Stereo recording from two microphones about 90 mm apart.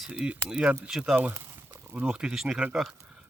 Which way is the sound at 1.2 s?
25° right (ahead or behind).